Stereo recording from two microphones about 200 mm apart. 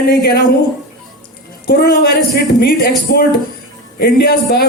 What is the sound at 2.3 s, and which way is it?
Speech, 50° left (ahead or behind).